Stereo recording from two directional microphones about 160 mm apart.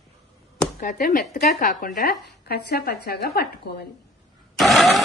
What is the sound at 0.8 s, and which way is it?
Speech, 60° left (ahead or behind).